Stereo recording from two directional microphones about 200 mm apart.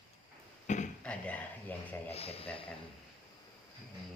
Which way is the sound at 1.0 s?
5° left (ahead or behind).